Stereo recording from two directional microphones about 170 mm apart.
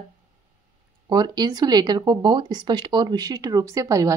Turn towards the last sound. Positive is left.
turn(degrees=-20)  # may be behind; listen again after turning